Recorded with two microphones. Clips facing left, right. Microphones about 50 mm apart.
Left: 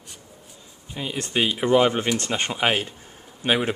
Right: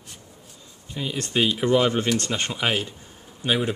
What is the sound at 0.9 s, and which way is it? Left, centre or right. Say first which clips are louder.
A man's voice: even; centre.